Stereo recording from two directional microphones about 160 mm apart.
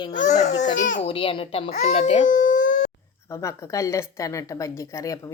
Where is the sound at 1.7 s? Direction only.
50° left (ahead or behind).